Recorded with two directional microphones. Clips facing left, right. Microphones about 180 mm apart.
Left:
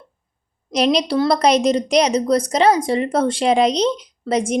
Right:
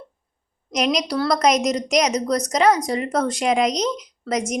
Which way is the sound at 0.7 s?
30° left (ahead or behind).